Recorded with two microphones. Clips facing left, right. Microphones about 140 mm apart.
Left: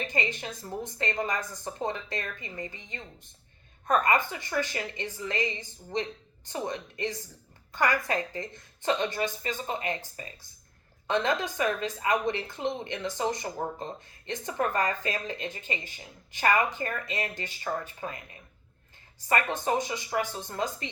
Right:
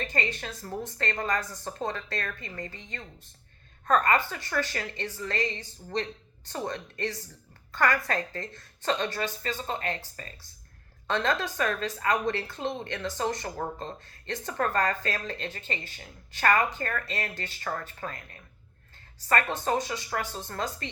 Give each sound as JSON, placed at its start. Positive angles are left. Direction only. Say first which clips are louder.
{"t": 0.0, "sound": "a woman's voice", "louder": "even", "side_deg": 20}
{"t": 11.1, "sound": "a woman's voice", "louder": "left 1 dB", "side_deg": 20}